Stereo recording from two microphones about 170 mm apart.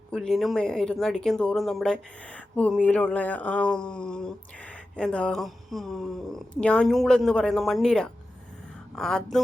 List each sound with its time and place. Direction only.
0.1 s speech: centre (ahead or behind)